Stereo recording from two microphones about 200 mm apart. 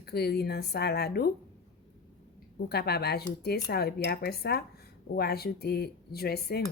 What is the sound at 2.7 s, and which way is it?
Speech, 55° left (ahead or behind).